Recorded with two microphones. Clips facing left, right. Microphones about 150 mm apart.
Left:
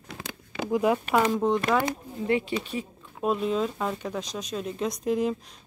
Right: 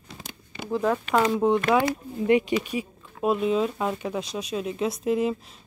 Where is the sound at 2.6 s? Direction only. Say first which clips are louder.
Right 3 dB; 10° right (ahead or behind).